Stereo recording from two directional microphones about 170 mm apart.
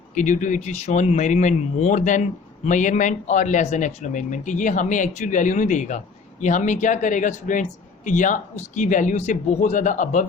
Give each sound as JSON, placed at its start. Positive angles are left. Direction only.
{"t": 0.1, "sound": "speech", "side_deg": 45}